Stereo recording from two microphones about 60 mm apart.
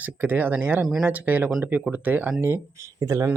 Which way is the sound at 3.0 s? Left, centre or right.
Right.